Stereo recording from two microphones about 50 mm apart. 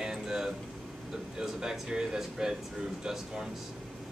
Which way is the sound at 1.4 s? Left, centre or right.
Centre.